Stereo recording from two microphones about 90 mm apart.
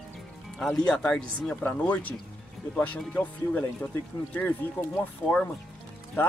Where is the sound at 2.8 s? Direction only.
15° left (ahead or behind).